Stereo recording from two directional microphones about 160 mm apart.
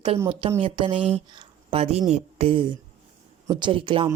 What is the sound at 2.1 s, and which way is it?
Speech, 35° right (ahead or behind).